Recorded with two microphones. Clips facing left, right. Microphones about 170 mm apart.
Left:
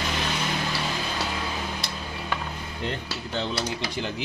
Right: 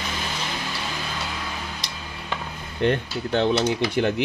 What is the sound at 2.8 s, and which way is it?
Speech, 65° right (ahead or behind).